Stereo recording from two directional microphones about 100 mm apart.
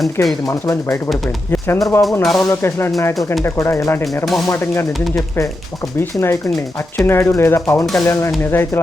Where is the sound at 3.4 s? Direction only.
25° left (ahead or behind).